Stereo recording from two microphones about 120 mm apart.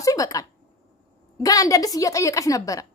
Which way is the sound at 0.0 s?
30° left (ahead or behind).